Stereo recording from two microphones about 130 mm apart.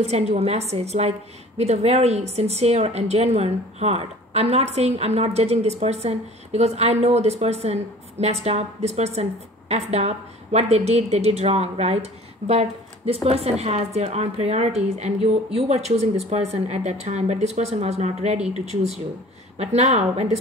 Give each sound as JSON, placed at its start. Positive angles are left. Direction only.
{"t": 0.0, "sound": "a woman's voice", "side_deg": -55}